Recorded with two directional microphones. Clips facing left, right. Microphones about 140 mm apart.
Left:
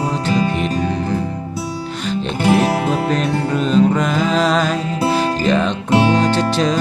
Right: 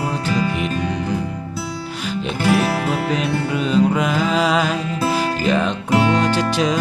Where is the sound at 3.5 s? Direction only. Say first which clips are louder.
Left 3 dB; 10° right (ahead or behind).